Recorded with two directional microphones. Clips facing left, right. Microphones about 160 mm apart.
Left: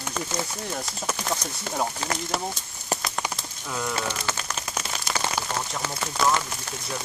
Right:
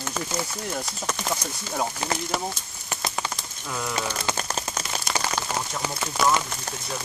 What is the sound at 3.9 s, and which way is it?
Speech, 15° right (ahead or behind).